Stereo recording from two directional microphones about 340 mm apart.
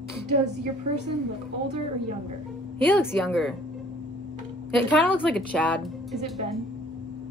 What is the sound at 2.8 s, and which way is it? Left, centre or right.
Speech, centre.